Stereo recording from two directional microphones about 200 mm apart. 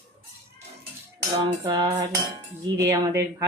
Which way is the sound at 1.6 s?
20° right (ahead or behind).